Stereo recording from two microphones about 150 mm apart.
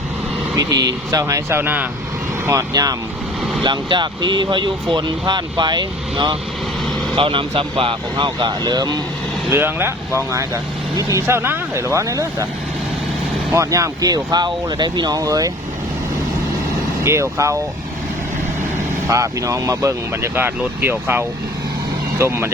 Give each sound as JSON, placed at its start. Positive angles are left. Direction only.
{"t": 0.5, "sound": "speech", "side_deg": -25}
{"t": 2.5, "sound": "speech", "side_deg": -25}
{"t": 9.5, "sound": "speech", "side_deg": -15}
{"t": 13.5, "sound": "speech", "side_deg": -20}
{"t": 17.0, "sound": "speech", "side_deg": -20}
{"t": 19.0, "sound": "speech", "side_deg": -20}